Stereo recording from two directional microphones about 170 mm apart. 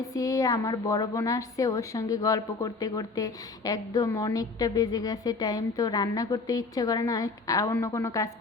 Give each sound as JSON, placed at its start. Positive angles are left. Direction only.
{"t": 0.0, "sound": "a woman's voice", "side_deg": 20}